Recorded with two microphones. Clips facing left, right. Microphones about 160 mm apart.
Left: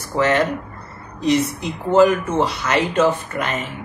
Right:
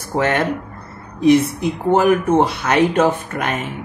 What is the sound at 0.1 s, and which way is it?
Speech, 55° right (ahead or behind).